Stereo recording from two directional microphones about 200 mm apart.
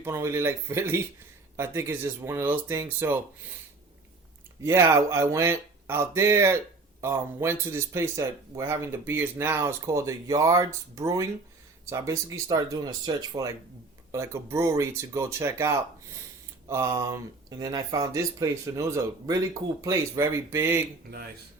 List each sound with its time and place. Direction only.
0.0 s speech: 15° right (ahead or behind)
4.6 s speech: 15° right (ahead or behind)